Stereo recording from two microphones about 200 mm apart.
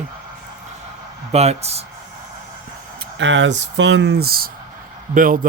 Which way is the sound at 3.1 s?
65° right (ahead or behind).